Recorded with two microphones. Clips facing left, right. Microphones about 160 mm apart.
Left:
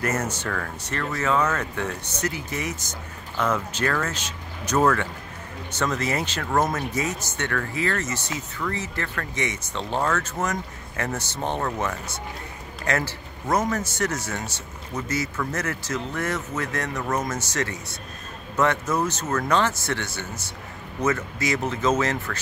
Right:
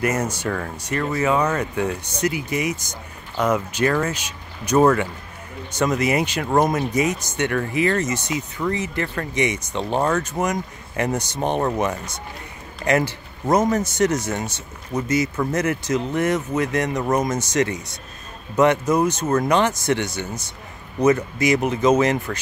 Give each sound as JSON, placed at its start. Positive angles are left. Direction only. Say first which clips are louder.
{"t": 0.0, "sound": "speech", "louder": "right 4 dB", "side_deg": -10}